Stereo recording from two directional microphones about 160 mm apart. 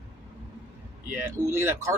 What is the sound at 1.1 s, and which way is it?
Speech, 15° right (ahead or behind).